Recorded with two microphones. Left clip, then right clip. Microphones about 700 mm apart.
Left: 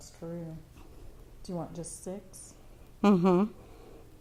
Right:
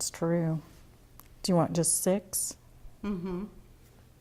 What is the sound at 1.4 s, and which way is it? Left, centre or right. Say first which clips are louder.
Speech: right 12 dB; right.